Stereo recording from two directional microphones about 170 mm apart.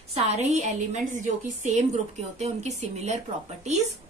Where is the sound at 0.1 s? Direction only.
40° right (ahead or behind).